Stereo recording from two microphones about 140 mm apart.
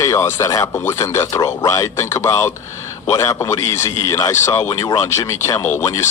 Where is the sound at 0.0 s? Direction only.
20° left (ahead or behind).